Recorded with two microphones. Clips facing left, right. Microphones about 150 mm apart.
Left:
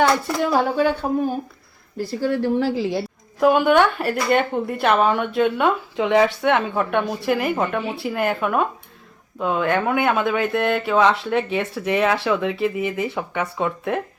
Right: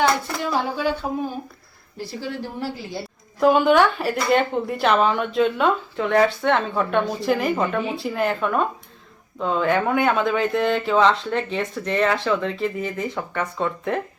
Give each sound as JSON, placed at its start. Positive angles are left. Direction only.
{"t": 0.5, "sound": "speech", "side_deg": 55}
{"t": 2.0, "sound": "speech", "side_deg": 50}
{"t": 2.6, "sound": "a woman's voice", "side_deg": 90}
{"t": 3.4, "sound": "speech", "side_deg": 0}
{"t": 6.0, "sound": "speech", "side_deg": 15}